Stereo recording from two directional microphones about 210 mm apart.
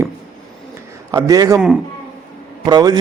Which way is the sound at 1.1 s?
15° right (ahead or behind).